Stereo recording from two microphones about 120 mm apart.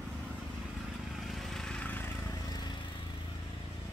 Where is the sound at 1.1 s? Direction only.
Centre (ahead or behind).